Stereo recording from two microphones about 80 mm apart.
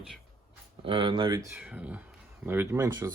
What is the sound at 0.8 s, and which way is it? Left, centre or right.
Speech, right.